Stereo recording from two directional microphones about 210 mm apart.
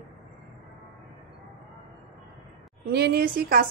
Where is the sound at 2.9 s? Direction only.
50° right (ahead or behind).